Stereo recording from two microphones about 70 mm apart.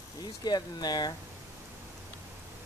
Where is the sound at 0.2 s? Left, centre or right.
Left.